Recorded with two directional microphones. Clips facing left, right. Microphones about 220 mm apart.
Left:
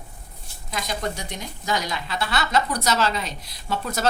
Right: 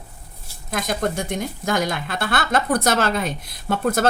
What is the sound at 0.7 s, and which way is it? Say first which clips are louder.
Speech: right 5 dB; 50° right (ahead or behind).